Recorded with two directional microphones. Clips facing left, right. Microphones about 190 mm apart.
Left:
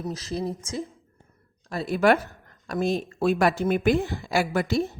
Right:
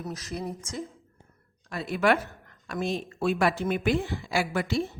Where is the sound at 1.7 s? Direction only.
35° left (ahead or behind).